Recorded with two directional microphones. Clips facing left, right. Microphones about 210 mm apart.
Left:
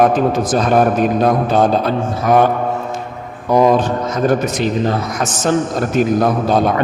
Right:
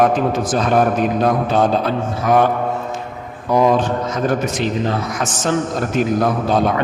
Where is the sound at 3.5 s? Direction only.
40° left (ahead or behind).